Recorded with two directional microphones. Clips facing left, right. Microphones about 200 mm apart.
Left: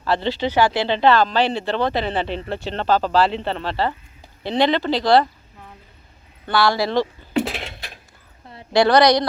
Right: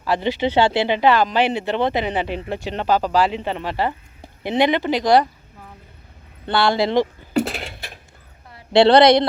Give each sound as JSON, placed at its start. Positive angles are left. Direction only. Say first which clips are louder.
{"t": 0.0, "sound": "speech", "louder": "right 1 dB", "side_deg": -15}
{"t": 6.4, "sound": "speech", "louder": "right 1 dB", "side_deg": -25}
{"t": 7.3, "sound": "a sound", "louder": "right 1 dB", "side_deg": 0}
{"t": 8.7, "sound": "speech", "louder": "right 3 dB", "side_deg": -25}